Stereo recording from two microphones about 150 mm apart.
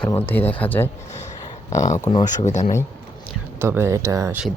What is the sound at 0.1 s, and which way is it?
Speech, 15° left (ahead or behind).